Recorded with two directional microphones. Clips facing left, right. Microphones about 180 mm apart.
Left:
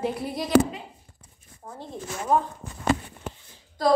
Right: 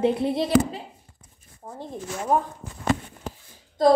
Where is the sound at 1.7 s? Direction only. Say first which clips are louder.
Right 2 dB; 15° right (ahead or behind).